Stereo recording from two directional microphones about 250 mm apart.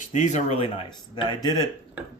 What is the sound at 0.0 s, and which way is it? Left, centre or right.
Speech, left.